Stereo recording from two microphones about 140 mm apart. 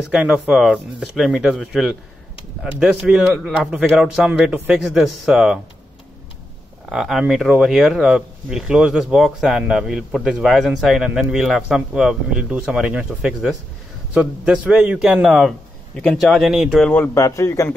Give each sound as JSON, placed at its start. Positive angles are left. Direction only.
{"t": 0.1, "sound": "speech", "side_deg": -5}
{"t": 6.9, "sound": "speech", "side_deg": 0}
{"t": 16.8, "sound": "speech", "side_deg": 10}